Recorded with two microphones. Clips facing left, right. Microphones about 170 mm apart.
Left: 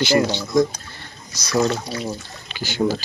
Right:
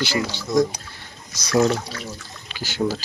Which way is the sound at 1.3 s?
50° right (ahead or behind).